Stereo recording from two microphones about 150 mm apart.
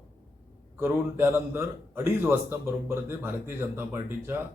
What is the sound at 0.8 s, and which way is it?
A man's voice, 15° right (ahead or behind).